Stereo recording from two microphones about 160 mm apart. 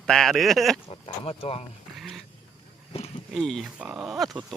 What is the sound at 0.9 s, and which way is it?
Speech, 40° left (ahead or behind).